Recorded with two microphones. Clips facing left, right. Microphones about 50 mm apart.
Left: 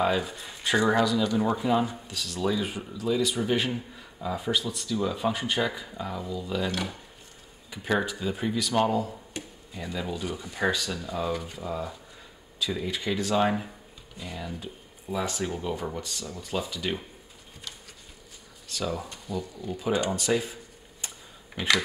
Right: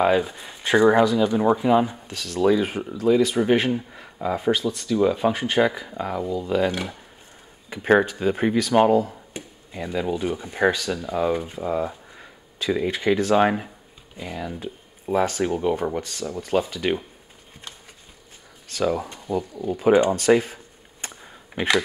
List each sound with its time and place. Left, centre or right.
0.0 s speech: right
2.0 s speech: right
7.7 s speech: right
15.4 s speech: right
15.7 s speech: right
18.7 s speech: right
20.2 s a sound: right
21.5 s speech: centre